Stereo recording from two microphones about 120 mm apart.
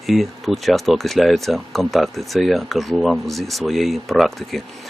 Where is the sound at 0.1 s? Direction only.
Centre (ahead or behind).